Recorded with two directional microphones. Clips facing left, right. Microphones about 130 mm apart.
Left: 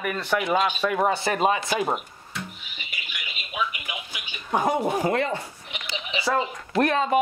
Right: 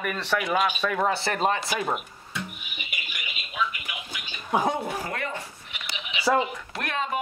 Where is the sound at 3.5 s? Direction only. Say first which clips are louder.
Left 1 dB; 20° left (ahead or behind).